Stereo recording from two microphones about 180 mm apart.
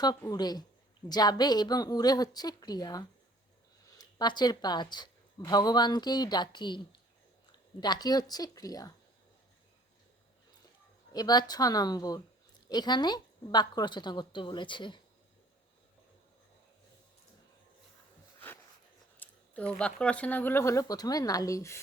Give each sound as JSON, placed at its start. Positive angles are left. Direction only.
{"t": 0.0, "sound": "a woman's voice", "side_deg": 20}
{"t": 11.1, "sound": "a woman's voice", "side_deg": 20}
{"t": 18.3, "sound": "dog", "side_deg": 10}
{"t": 19.1, "sound": "a sound", "side_deg": 10}
{"t": 19.8, "sound": "speech", "side_deg": 5}